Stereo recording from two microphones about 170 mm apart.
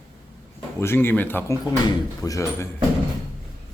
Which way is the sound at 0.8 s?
15° left (ahead or behind).